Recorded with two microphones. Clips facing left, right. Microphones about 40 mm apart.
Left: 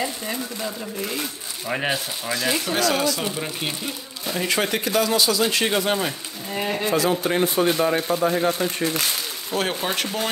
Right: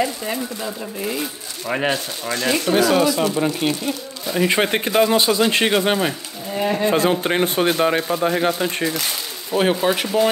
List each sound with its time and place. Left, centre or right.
1.7 s speech: centre
3.5 s speech: centre
4.5 s speech: right
6.6 s speech: centre
6.9 s speech: right
9.5 s speech: centre